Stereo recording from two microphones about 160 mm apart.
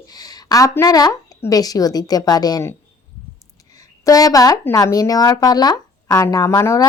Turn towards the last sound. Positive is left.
turn(degrees=20)  # may be behind; listen again after turning